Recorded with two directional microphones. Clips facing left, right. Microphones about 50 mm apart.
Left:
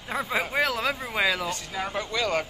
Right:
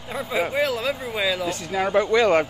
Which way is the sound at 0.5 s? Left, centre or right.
Left.